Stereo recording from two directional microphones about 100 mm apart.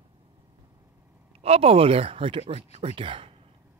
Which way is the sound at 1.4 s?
85° right.